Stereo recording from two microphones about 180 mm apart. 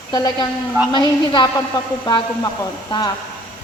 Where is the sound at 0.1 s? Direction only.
20° left (ahead or behind).